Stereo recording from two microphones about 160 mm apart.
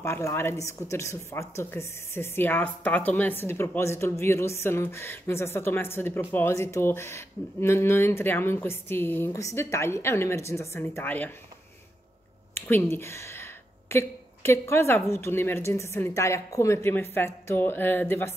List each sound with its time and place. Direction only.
0.0 s a woman's voice: 15° left (ahead or behind)
12.5 s a woman's voice: 15° left (ahead or behind)